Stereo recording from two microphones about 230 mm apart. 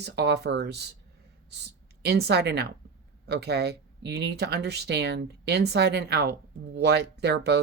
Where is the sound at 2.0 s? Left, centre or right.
Right.